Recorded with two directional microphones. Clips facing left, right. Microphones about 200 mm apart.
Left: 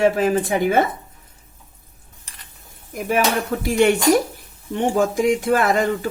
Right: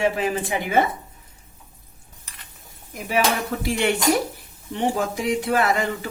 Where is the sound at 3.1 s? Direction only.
50° left (ahead or behind).